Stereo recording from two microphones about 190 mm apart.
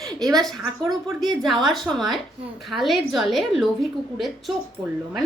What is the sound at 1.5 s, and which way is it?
A woman's voice, centre (ahead or behind).